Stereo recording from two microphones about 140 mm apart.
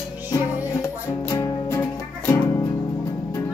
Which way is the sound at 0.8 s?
20° left (ahead or behind).